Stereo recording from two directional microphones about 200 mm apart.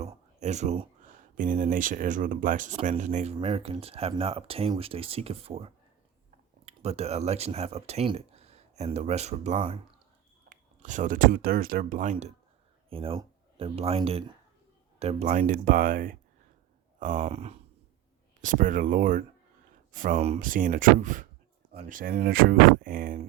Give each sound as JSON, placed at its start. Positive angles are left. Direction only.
{"t": 0.0, "sound": "a sound", "side_deg": -35}
{"t": 1.4, "sound": "speech", "side_deg": -40}
{"t": 3.3, "sound": "speech", "side_deg": -25}
{"t": 12.9, "sound": "speech", "side_deg": -25}
{"t": 18.4, "sound": "speech", "side_deg": -40}